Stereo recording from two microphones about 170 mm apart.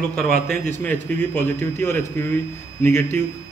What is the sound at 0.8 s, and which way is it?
A man's voice, 10° left (ahead or behind).